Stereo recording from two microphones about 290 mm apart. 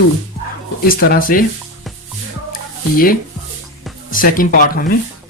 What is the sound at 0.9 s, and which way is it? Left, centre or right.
Speech, left.